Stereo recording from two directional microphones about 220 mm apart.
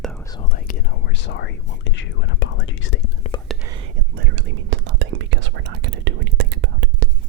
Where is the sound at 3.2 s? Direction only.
30° left (ahead or behind).